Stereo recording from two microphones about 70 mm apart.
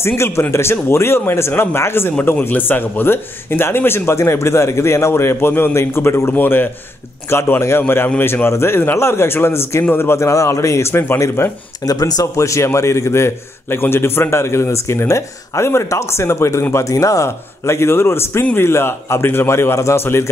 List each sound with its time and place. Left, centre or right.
0.0 s a man's voice: left
6.3 s a man's voice: left
11.8 s speech: left
12.4 s a man's voice: left
18.4 s a man's voice: left
18.7 s a man's voice: left